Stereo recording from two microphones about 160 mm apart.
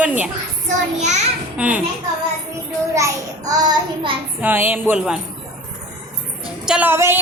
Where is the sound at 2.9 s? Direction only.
20° right (ahead or behind).